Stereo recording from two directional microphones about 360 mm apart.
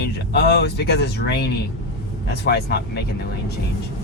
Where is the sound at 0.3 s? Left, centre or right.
Left.